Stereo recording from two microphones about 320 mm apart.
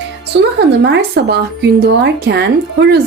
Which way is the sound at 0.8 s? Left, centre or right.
Right.